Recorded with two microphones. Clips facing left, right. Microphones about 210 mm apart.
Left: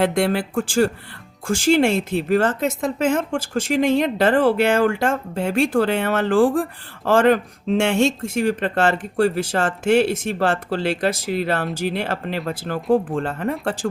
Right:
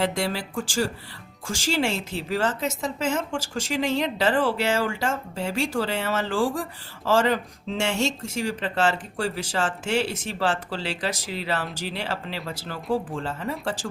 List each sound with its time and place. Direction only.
0.0 s a woman's voice: 55° left (ahead or behind)